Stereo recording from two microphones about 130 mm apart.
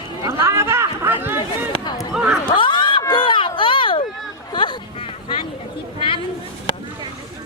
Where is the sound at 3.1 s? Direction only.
40° left (ahead or behind).